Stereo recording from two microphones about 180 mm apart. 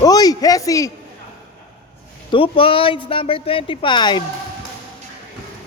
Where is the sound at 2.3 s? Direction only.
30° left (ahead or behind).